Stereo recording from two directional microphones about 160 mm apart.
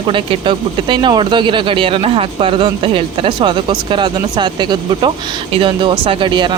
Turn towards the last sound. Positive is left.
turn(degrees=-30)  # may be behind; listen again after turning